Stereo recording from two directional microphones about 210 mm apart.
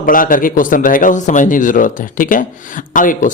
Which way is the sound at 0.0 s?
40° left (ahead or behind).